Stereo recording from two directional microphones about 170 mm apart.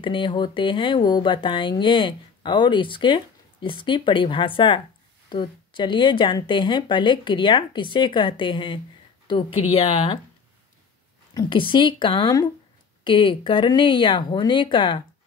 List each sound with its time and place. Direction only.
0.0 s a woman's voice: 30° left (ahead or behind)
11.3 s a woman's voice: 30° left (ahead or behind)